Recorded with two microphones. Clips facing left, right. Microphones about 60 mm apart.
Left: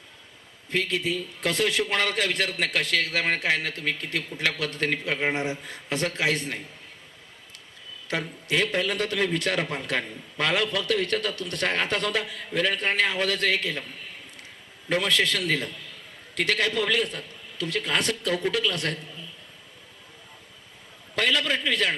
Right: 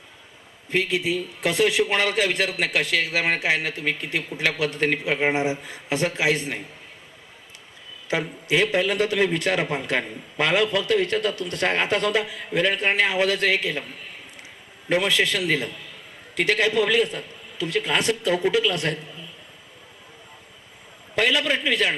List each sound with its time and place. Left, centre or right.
0.7 s a man's voice: centre
8.1 s a man's voice: centre
21.2 s a man's voice: centre